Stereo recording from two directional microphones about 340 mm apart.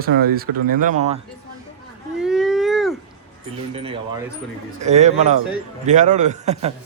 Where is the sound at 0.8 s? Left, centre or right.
Right.